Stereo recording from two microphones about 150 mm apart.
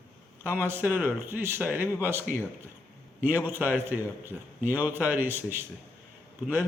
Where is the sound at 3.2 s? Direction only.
15° right (ahead or behind).